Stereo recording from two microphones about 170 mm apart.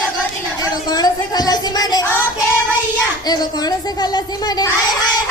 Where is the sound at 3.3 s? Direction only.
25° left (ahead or behind).